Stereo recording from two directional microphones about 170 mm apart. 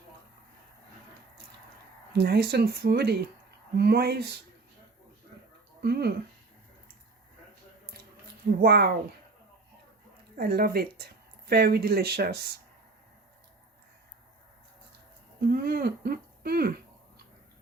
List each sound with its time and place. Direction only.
2.1 s speech: 70° right (ahead or behind)
5.8 s speech: 70° right (ahead or behind)
8.6 s speech: 65° right (ahead or behind)
10.3 s speech: 65° right (ahead or behind)
15.4 s speech: 60° right (ahead or behind)